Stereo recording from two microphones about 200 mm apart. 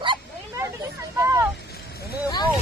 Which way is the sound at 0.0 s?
25° right (ahead or behind).